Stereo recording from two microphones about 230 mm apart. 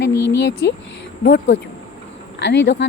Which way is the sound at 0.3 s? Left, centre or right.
Left.